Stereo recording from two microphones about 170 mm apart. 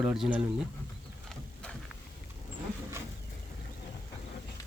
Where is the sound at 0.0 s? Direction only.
5° right (ahead or behind).